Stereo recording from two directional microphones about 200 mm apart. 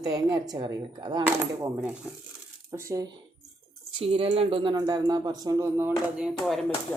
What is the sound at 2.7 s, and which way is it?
Cutlery, 15° right (ahead or behind).